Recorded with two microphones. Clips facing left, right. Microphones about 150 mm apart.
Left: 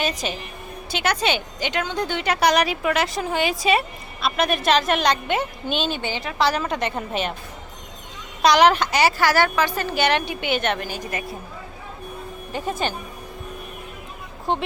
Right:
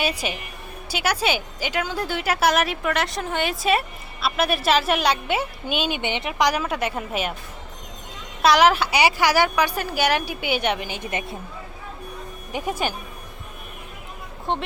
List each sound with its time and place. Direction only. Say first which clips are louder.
0.0 s a woman's voice: even; 10° right (ahead or behind)
6.0 s a woman's voice: even; 20° right (ahead or behind)
8.4 s a woman's voice: left 1 dB; 5° right (ahead or behind); by 11.3 s 25° right (ahead or behind)
12.5 s a woman's voice: even; 15° right (ahead or behind)
14.5 s a woman's voice: left 2 dB; centre (ahead or behind)